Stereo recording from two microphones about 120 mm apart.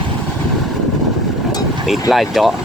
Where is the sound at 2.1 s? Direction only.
Centre (ahead or behind).